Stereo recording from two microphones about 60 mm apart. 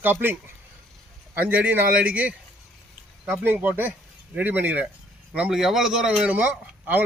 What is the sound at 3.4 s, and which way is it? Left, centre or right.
A man's voice, right.